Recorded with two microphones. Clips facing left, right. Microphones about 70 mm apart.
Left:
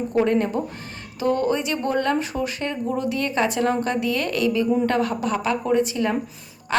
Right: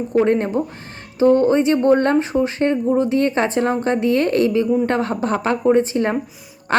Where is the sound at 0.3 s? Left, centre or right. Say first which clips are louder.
Right 3 dB; right.